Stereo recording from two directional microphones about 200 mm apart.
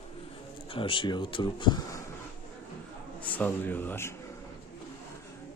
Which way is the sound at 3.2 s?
10° left (ahead or behind).